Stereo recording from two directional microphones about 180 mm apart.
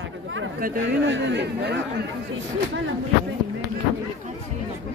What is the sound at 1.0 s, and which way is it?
Speech, 85° right.